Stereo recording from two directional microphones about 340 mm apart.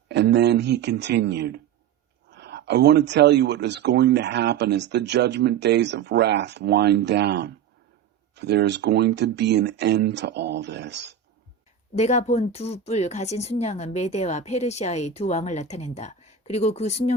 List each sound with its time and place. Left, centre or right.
0.1 s speech: right
11.9 s speech: centre